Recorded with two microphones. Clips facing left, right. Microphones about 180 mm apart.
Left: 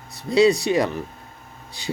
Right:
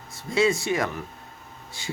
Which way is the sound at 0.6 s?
20° left (ahead or behind).